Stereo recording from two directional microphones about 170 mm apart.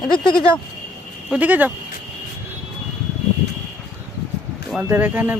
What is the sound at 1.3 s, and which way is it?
Speech, 10° right (ahead or behind).